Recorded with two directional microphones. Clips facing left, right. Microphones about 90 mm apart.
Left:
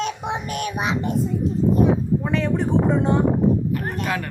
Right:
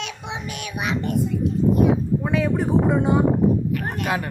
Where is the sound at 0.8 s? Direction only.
25° left (ahead or behind).